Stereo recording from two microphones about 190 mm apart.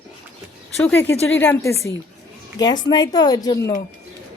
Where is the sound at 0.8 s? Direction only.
10° left (ahead or behind).